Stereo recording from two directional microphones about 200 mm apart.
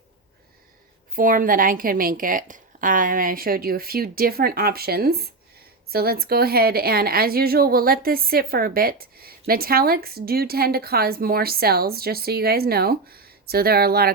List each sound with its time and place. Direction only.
1.1 s a woman's voice: 45° right (ahead or behind)